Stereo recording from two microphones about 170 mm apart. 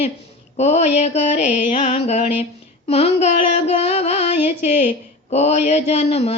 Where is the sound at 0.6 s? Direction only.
40° left (ahead or behind).